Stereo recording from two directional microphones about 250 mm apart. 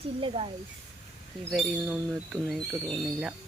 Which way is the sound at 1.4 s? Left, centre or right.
Centre.